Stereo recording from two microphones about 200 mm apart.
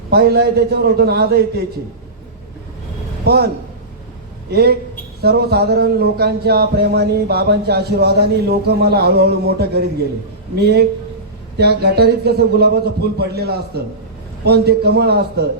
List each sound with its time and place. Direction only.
0.1 s speech: 55° right (ahead or behind)
3.2 s speech: 55° right (ahead or behind)
4.5 s speech: 50° right (ahead or behind)